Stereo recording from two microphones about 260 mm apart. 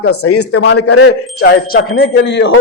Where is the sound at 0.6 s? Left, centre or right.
Left.